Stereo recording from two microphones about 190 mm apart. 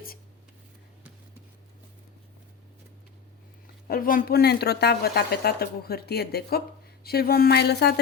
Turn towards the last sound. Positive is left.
turn(degrees=60)  # may be behind; listen again after turning